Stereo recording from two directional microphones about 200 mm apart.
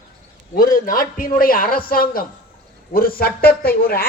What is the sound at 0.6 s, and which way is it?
A man's voice, 45° left (ahead or behind).